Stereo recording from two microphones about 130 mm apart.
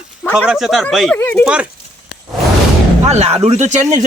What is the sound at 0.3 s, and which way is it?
Speech, 5° right (ahead or behind).